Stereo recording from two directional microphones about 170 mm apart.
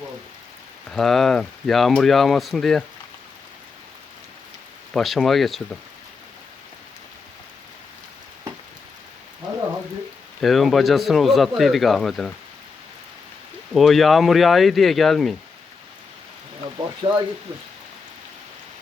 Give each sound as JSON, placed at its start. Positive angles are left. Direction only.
{"t": 0.9, "sound": "speech", "side_deg": 0}
{"t": 4.9, "sound": "speech", "side_deg": 0}
{"t": 10.4, "sound": "speech", "side_deg": 0}
{"t": 13.7, "sound": "speech", "side_deg": 0}
{"t": 17.0, "sound": "speech", "side_deg": -30}